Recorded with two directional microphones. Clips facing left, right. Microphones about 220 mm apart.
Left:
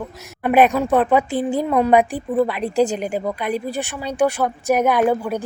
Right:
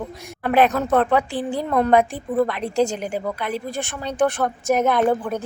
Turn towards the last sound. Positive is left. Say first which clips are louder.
# left 1 dB
turn(degrees=10)  # may be behind; listen again after turning